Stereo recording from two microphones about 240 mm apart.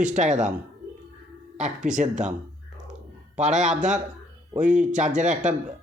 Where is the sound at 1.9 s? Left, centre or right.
Right.